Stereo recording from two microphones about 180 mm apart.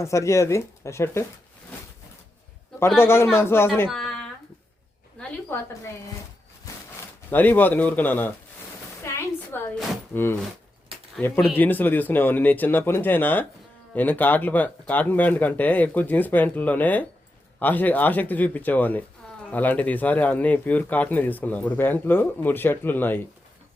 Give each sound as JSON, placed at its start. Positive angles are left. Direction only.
{"t": 0.0, "sound": "speech", "side_deg": 15}
{"t": 2.8, "sound": "speech", "side_deg": 15}
{"t": 3.8, "sound": "speech", "side_deg": 0}
{"t": 5.5, "sound": "speech", "side_deg": 10}
{"t": 6.7, "sound": "a sound", "side_deg": 20}
{"t": 7.3, "sound": "speech", "side_deg": 10}
{"t": 9.0, "sound": "a sound", "side_deg": 15}
{"t": 11.2, "sound": "speech", "side_deg": 0}